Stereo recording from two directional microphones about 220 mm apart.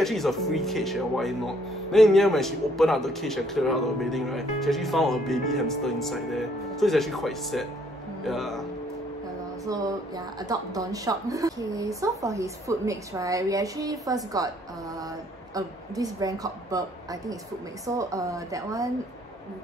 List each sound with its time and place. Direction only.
0.0 s speech: centre (ahead or behind)
9.7 s a woman's voice: 15° right (ahead or behind)
15.5 s a woman's voice: 15° right (ahead or behind)